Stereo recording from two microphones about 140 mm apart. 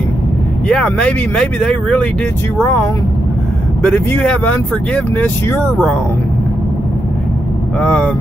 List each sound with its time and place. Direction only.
0.7 s speech: 5° left (ahead or behind)
2.5 s speech: 15° left (ahead or behind)
7.8 s speech: 5° left (ahead or behind)